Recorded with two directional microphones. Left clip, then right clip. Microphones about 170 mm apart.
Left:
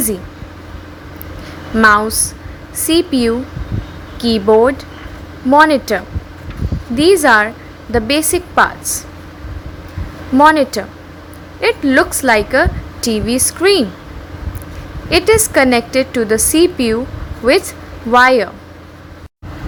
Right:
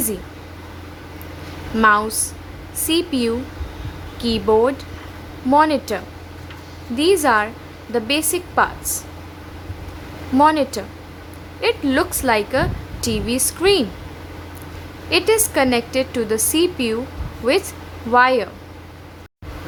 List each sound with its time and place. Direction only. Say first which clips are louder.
1.8 s a woman's voice: left 5 dB; 15° left (ahead or behind)
10.3 s a woman's voice: left 6 dB; 15° left (ahead or behind)
15.1 s a woman's voice: left 6 dB; 15° left (ahead or behind)